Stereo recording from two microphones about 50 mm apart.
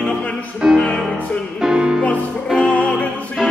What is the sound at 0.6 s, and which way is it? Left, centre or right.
Music, centre.